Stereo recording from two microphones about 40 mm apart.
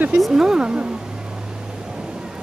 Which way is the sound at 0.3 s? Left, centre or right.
Centre.